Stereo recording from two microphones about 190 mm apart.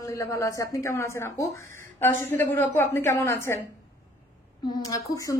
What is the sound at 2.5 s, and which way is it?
A woman's voice, 10° left (ahead or behind).